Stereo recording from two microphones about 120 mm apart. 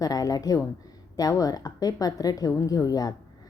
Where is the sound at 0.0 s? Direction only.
30° left (ahead or behind).